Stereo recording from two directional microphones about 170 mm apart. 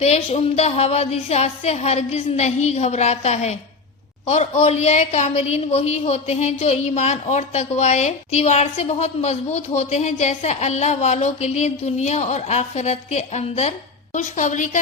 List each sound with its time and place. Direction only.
0.0 s a woman's voice: 40° left (ahead or behind)